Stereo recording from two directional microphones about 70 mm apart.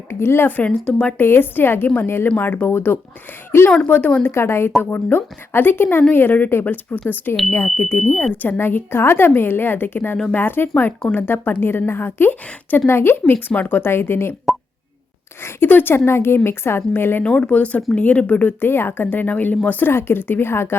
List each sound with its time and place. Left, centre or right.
0.1 s speech: left; by 1.1 s centre
1.2 s speech: left
8.0 s speech: left
13.3 s speech: left
15.4 s speech: left
17.2 s speech: centre
19.9 s speech: left